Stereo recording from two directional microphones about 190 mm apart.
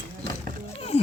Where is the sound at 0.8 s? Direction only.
30° left (ahead or behind).